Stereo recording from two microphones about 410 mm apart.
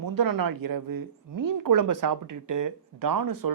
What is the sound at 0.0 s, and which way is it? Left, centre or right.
A woman's voice, right.